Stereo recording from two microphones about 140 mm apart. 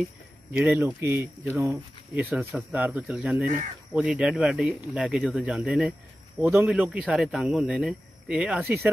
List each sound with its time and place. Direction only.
0.5 s speech: 15° right (ahead or behind)